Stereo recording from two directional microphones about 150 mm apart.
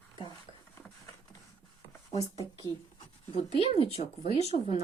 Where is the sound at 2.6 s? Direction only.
35° left (ahead or behind).